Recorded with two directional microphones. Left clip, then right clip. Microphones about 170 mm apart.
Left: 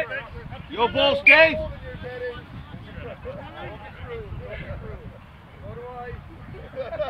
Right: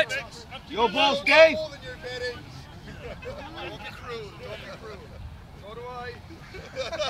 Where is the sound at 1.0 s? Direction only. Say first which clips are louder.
Left 3 dB; 45° right (ahead or behind).